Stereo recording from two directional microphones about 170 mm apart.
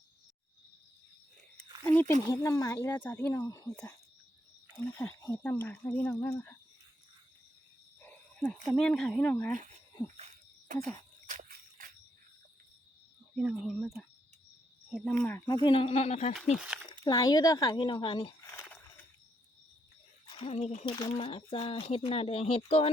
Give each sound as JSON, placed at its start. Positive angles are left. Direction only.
{"t": 1.8, "sound": "a sound", "side_deg": 10}
{"t": 2.2, "sound": "speech", "side_deg": 20}
{"t": 4.8, "sound": "speech", "side_deg": 15}
{"t": 8.0, "sound": "wild animals", "side_deg": 10}
{"t": 8.6, "sound": "speech", "side_deg": 5}
{"t": 10.7, "sound": "insect", "side_deg": -55}
{"t": 11.3, "sound": "a sound", "side_deg": -55}
{"t": 13.3, "sound": "speech", "side_deg": -5}
{"t": 15.2, "sound": "speech", "side_deg": 10}
{"t": 15.6, "sound": "speech", "side_deg": 30}
{"t": 16.6, "sound": "speech", "side_deg": -5}
{"t": 17.0, "sound": "speech", "side_deg": 20}
{"t": 20.2, "sound": "speech", "side_deg": 30}